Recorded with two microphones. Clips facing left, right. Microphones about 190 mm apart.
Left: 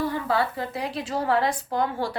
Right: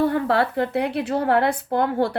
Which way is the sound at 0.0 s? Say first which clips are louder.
Right 5 dB; 60° right (ahead or behind).